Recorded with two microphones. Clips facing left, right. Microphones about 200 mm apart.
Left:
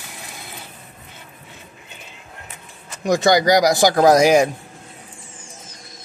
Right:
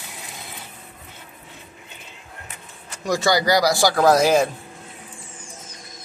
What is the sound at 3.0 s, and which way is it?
A man's voice, 20° left (ahead or behind).